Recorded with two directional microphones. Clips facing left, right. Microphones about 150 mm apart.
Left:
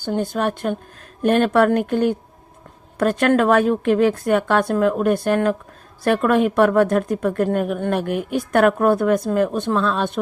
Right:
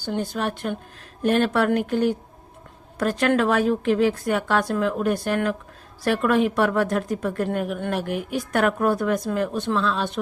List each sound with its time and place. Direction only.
0.0 s a woman's voice: 50° left (ahead or behind)